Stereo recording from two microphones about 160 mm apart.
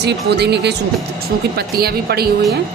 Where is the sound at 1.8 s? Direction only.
75° right (ahead or behind).